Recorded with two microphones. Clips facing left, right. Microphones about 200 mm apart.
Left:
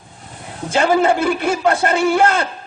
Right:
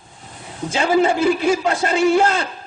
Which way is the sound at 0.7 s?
60° left (ahead or behind).